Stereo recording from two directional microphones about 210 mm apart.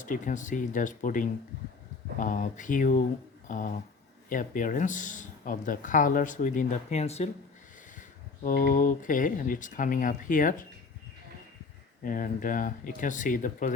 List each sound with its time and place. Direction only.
0.0 s speech: 35° left (ahead or behind)
8.4 s speech: 40° left (ahead or behind)
12.0 s speech: 40° left (ahead or behind)